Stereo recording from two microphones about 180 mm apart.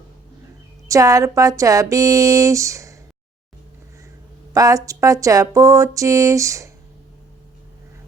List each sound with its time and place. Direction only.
0.9 s speech: 20° right (ahead or behind)
4.5 s speech: 20° right (ahead or behind)